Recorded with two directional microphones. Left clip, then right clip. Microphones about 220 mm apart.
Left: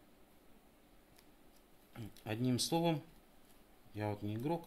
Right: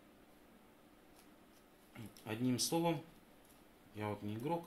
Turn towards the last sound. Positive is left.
turn(degrees=50)  # may be behind; listen again after turning